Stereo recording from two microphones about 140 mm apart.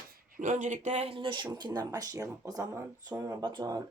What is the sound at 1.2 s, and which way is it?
Speech, 35° right (ahead or behind).